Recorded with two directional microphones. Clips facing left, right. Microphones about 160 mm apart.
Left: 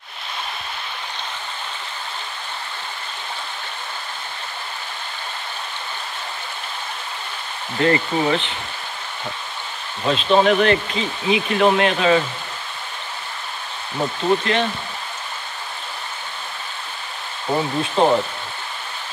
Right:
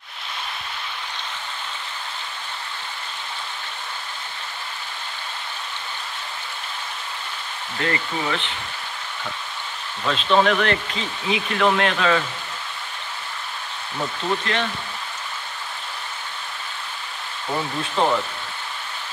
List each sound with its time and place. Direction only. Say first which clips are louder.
7.8 s speech: left 7 dB; 30° left (ahead or behind)
10.0 s speech: left 3 dB; 15° left (ahead or behind)
13.9 s speech: left 6 dB; 20° left (ahead or behind)
17.5 s speech: left 5 dB; 20° left (ahead or behind)